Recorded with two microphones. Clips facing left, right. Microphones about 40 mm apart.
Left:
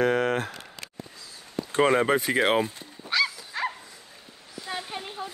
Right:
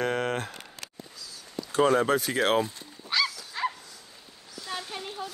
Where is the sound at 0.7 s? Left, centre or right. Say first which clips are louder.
Left 2 dB; left.